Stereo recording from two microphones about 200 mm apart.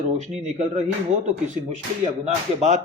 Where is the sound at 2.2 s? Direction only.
35° right (ahead or behind).